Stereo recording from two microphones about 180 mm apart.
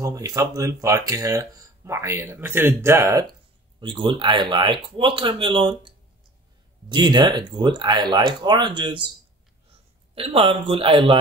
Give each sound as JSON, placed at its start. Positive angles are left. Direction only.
{"t": 0.0, "sound": "speech", "side_deg": -20}
{"t": 3.8, "sound": "speech", "side_deg": -25}
{"t": 10.1, "sound": "speech", "side_deg": -30}